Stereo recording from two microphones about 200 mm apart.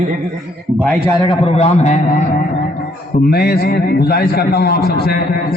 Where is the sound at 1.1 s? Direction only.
25° left (ahead or behind).